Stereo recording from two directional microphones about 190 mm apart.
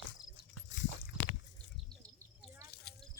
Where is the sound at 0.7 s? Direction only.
75° left (ahead or behind).